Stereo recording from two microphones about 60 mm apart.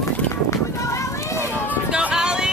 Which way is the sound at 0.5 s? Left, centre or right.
Left.